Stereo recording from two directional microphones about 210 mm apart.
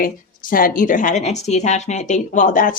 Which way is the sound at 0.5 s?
40° left (ahead or behind).